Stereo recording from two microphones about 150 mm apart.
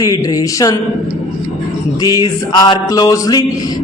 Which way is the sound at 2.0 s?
25° left (ahead or behind).